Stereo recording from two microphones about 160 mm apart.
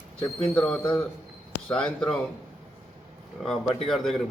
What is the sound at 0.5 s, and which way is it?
A man's voice, 5° left (ahead or behind).